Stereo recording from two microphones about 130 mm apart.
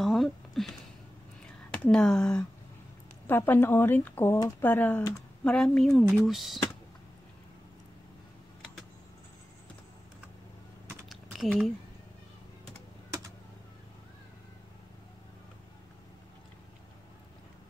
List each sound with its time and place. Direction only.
0.0 s a sound: centre (ahead or behind)
1.7 s speech: 5° left (ahead or behind)
5.4 s speech: 5° left (ahead or behind)
11.1 s typing: centre (ahead or behind)